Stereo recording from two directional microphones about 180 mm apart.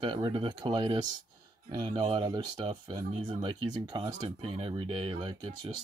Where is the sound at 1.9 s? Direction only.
25° right (ahead or behind).